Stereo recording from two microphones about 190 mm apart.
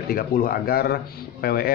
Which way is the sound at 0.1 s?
50° left (ahead or behind).